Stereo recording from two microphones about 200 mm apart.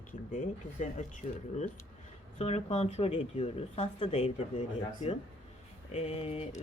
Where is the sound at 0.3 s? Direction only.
35° left (ahead or behind).